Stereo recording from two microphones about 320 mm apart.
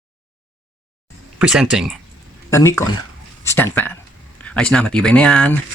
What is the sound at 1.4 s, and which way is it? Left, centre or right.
Speech, centre.